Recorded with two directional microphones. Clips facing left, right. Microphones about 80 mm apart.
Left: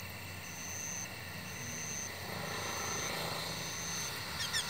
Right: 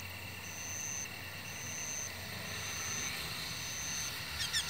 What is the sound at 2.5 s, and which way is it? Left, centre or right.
Vehicle, left.